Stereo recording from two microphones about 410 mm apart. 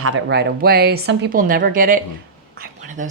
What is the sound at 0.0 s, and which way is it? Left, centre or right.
A woman's voice, right.